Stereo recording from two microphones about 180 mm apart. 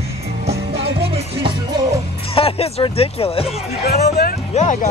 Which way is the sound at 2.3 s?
30° left (ahead or behind).